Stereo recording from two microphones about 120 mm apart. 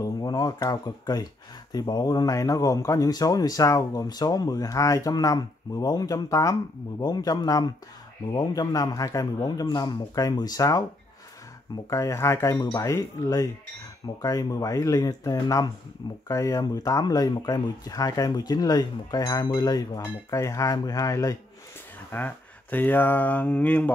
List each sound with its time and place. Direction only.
0.0 s speech: 35° left (ahead or behind)
22.1 s speech: 15° left (ahead or behind)